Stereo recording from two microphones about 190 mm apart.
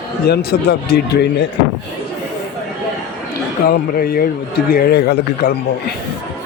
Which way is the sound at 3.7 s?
50° left (ahead or behind).